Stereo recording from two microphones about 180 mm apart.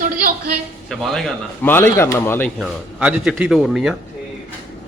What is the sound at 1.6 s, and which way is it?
Speech, 10° left (ahead or behind).